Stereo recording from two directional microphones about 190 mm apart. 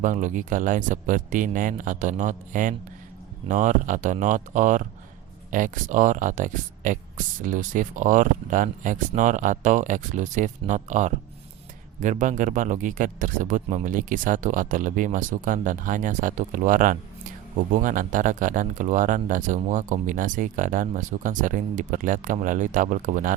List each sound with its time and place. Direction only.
0.0 s speech: 40° right (ahead or behind)